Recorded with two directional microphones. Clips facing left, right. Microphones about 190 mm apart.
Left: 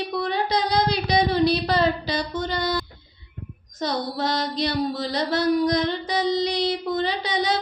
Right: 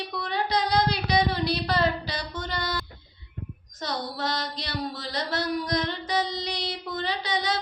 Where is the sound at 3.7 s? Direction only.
15° left (ahead or behind).